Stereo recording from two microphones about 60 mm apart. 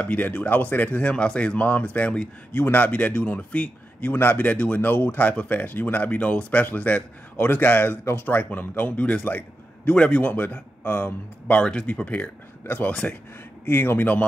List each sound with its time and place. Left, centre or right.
0.0 s speech: left
4.2 s a man's voice: left
4.5 s speech: left
11.4 s a man's voice: centre